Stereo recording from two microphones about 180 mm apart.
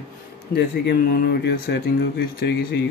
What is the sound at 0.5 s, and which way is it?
Speech, 60° left (ahead or behind).